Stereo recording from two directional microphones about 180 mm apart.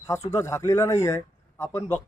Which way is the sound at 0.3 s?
15° left (ahead or behind).